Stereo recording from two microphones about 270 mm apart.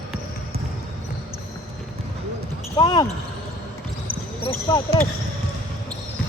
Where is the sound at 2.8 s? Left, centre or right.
Centre.